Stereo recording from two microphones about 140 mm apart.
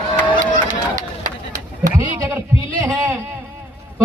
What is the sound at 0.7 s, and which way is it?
Run, 65° right (ahead or behind).